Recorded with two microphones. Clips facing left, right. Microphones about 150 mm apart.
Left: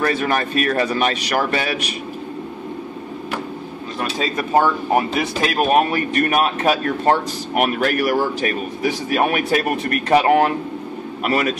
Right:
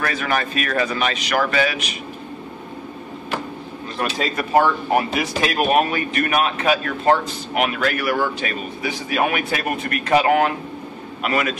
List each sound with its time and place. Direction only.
0.0 s a man's voice: 35° left (ahead or behind)
4.9 s a man's voice: 30° left (ahead or behind)